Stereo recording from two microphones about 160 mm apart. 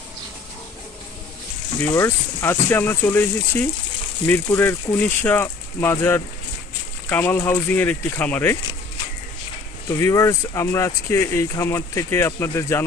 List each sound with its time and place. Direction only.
1.8 s speech: 15° left (ahead or behind)
9.8 s speech: 20° left (ahead or behind)